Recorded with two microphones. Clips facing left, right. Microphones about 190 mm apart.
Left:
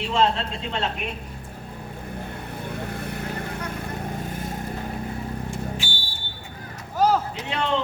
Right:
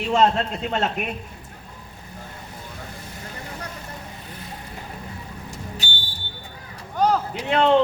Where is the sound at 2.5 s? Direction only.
60° left (ahead or behind).